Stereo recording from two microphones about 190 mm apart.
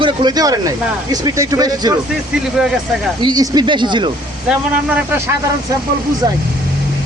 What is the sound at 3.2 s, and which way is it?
Speech, 20° right (ahead or behind).